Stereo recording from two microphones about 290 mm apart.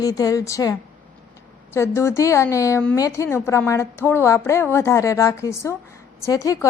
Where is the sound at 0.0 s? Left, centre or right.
Centre.